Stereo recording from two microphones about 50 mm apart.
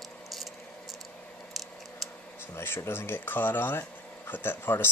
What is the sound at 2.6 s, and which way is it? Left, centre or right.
Speech, left.